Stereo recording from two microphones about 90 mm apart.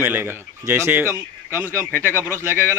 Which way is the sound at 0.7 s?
30° right (ahead or behind).